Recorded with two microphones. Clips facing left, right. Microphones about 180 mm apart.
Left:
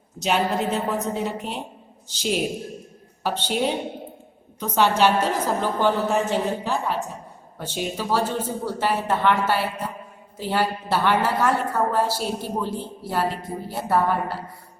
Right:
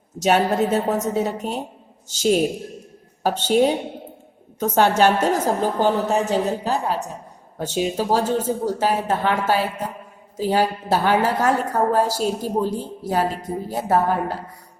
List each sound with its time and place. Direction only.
0.2 s a woman's voice: 45° right (ahead or behind)
4.6 s a woman's voice: 45° right (ahead or behind)